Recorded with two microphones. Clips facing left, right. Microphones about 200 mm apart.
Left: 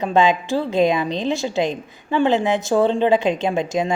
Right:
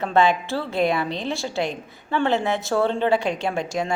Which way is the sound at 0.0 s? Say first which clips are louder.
Left 2 dB; 15° left (ahead or behind).